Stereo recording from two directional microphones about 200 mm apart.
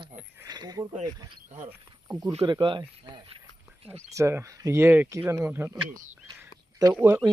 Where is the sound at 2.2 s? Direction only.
20° right (ahead or behind).